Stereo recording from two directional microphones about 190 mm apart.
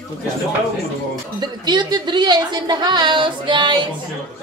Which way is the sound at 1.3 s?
25° right (ahead or behind).